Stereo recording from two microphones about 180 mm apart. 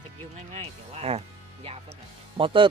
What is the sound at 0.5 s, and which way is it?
Speech, 35° right (ahead or behind).